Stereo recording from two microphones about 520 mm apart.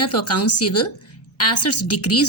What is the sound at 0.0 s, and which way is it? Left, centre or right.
A woman's voice, left.